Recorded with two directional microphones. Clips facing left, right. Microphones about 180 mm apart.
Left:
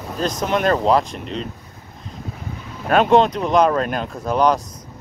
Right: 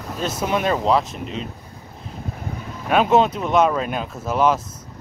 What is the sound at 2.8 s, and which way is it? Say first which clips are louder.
Speech: left 2 dB; 5° right (ahead or behind).